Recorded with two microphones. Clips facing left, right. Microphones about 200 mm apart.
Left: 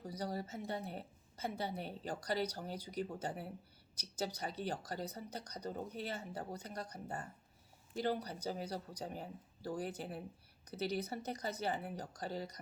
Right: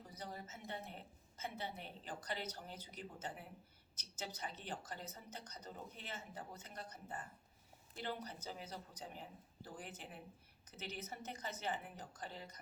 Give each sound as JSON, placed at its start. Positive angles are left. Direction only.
{"t": 0.0, "sound": "a woman's voice", "side_deg": 40}